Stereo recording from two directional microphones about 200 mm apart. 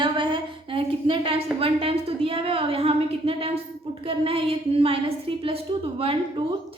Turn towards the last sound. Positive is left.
turn(degrees=-25)  # may be behind; listen again after turning